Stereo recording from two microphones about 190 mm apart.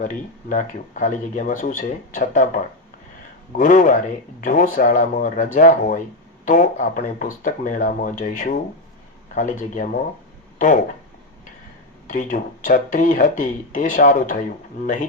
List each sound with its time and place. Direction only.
0.0 s speech: 45° left (ahead or behind)
3.5 s speech: 45° left (ahead or behind)
12.0 s speech: 45° left (ahead or behind)